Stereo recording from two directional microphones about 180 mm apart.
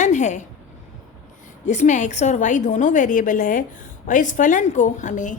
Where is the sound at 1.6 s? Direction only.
40° left (ahead or behind).